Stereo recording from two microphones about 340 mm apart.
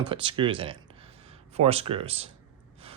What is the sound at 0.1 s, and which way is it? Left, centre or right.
Speech, centre.